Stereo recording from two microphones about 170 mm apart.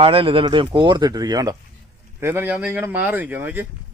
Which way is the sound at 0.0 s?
30° right (ahead or behind).